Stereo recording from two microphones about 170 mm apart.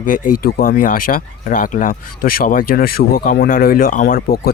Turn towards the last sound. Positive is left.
turn(degrees=60)  # may be behind; listen again after turning